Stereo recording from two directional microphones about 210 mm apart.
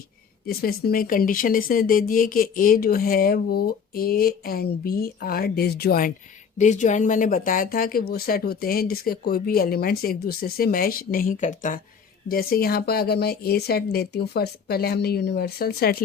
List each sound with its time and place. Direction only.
0.4 s speech: 45° left (ahead or behind)